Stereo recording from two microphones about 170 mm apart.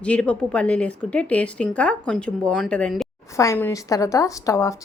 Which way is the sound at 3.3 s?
20° left (ahead or behind).